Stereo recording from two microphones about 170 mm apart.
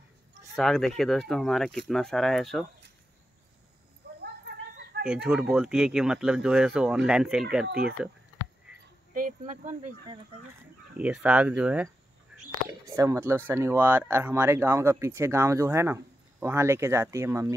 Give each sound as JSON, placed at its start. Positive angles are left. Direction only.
{"t": 0.6, "sound": "speech", "side_deg": 0}
{"t": 4.2, "sound": "a sound", "side_deg": -80}
{"t": 5.0, "sound": "speech", "side_deg": -5}
{"t": 7.6, "sound": "speech", "side_deg": -65}
{"t": 9.1, "sound": "speech", "side_deg": -50}
{"t": 11.0, "sound": "speech", "side_deg": -5}
{"t": 12.3, "sound": "a sound", "side_deg": -5}
{"t": 12.8, "sound": "speech", "side_deg": -20}